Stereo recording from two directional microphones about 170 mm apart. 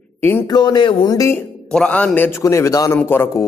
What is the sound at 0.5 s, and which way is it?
Speech, 25° left (ahead or behind).